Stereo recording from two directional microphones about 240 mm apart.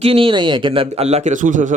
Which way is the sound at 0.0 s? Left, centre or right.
Right.